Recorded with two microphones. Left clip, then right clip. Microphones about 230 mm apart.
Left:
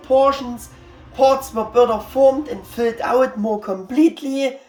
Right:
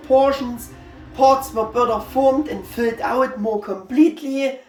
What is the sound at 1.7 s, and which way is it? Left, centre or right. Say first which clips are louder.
Speech: left 5 dB; centre.